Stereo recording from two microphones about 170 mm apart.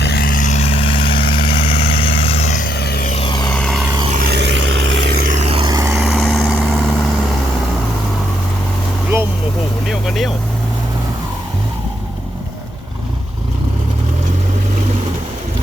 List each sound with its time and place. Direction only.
0.0 s vehicle: 65° left (ahead or behind)
3.1 s vehicle: 30° left (ahead or behind)
3.5 s vehicle: 5° left (ahead or behind)
4.3 s vehicle: 90° right
5.2 s vehicle: 45° right (ahead or behind); by 5.9 s 25° right (ahead or behind)
5.9 s vehicle: centre (ahead or behind)
9.8 s vehicle: centre (ahead or behind)